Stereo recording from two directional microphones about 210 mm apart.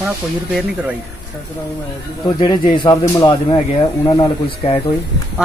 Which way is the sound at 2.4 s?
20° left (ahead or behind).